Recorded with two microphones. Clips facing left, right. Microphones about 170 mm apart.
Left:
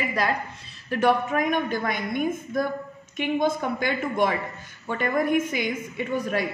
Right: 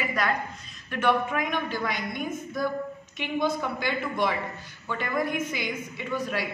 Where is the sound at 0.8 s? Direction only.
40° left (ahead or behind).